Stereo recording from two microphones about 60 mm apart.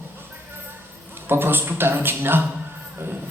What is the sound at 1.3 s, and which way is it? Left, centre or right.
A man's voice, right.